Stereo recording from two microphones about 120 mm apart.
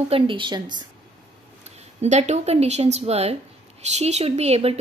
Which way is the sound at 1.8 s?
75° right (ahead or behind).